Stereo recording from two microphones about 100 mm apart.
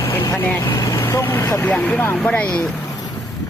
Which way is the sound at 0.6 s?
25° left (ahead or behind).